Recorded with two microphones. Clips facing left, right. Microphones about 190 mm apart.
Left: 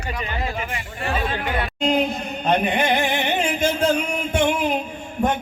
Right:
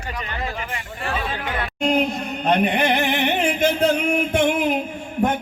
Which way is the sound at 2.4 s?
60° right (ahead or behind).